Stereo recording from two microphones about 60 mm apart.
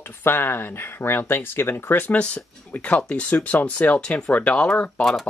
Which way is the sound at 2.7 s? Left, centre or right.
Left.